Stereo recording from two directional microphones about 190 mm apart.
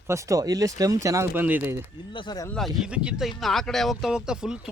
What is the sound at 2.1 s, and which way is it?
Speech, 20° left (ahead or behind).